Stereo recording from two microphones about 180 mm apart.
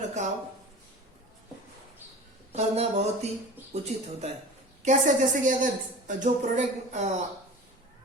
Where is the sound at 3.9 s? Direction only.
35° right (ahead or behind).